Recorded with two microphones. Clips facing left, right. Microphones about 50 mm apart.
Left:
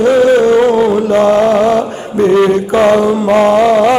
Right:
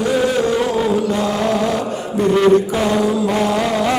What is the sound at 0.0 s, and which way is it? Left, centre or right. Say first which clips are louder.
Chant: left 9 dB; left.